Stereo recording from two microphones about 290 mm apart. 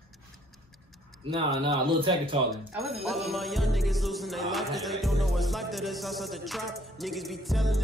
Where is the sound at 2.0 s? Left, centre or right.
Centre.